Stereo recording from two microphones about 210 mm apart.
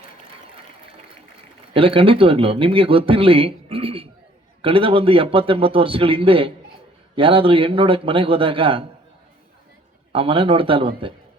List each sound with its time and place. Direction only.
1.7 s speech: 25° right (ahead or behind)
10.1 s speech: 25° right (ahead or behind)